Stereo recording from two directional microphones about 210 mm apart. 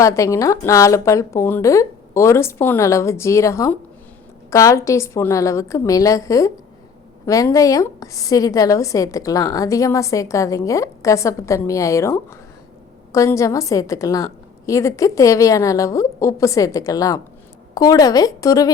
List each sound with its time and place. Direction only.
0.0 s a woman's voice: 15° left (ahead or behind)